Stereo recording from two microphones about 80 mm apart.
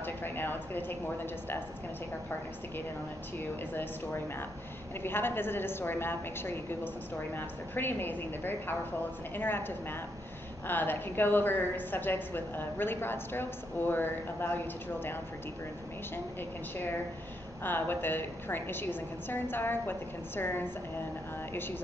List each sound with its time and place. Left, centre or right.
0.0 s a woman's voice: left
3.3 s a woman's voice: left
17.6 s a woman's voice: left